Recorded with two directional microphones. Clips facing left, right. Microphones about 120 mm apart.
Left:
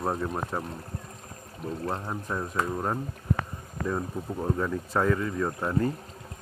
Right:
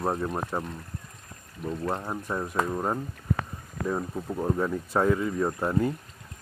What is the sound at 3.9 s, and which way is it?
Speech, 10° right (ahead or behind).